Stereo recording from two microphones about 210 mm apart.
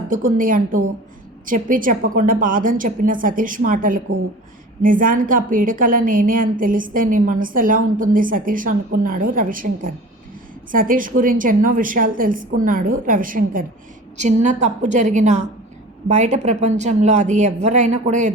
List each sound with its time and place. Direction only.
0.1 s a woman's voice: 40° right (ahead or behind)